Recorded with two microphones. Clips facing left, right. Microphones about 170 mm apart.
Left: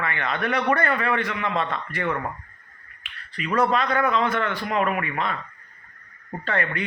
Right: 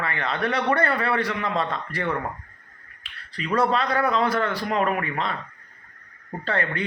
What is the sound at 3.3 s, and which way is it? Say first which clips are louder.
A man's voice: even; 30° right (ahead or behind).